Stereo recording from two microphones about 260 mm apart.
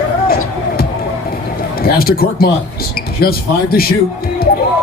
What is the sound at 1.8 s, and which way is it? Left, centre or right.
A man's voice, left.